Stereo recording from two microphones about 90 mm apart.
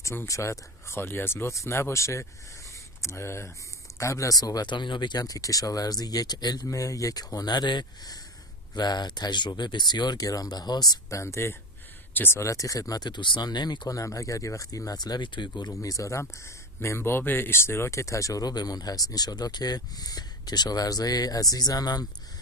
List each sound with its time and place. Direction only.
0.0 s speech: 30° left (ahead or behind); by 5.2 s 60° left (ahead or behind)
5.2 s speech: 40° left (ahead or behind); by 12.4 s 25° left (ahead or behind)
12.4 s speech: 40° left (ahead or behind); by 15.7 s 55° left (ahead or behind)
15.7 s speech: 40° left (ahead or behind)